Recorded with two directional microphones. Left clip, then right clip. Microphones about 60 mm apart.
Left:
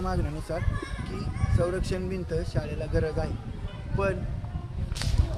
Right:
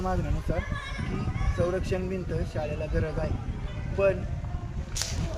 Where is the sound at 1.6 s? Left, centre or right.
Left.